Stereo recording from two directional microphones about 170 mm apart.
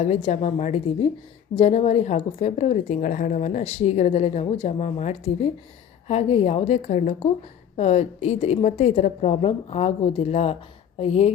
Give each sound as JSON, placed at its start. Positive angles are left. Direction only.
{"t": 0.0, "sound": "a woman's voice", "side_deg": 40}